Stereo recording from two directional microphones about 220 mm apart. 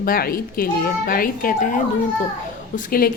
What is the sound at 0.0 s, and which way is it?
Speech, 40° left (ahead or behind).